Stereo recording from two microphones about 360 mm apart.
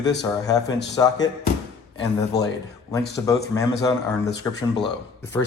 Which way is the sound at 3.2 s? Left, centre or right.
Centre.